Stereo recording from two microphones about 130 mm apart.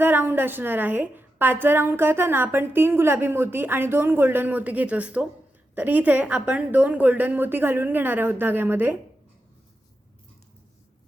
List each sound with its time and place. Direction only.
0.0 s a woman's voice: 15° right (ahead or behind)